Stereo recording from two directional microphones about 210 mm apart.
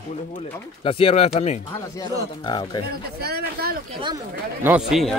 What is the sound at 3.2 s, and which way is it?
Speech, 50° right (ahead or behind).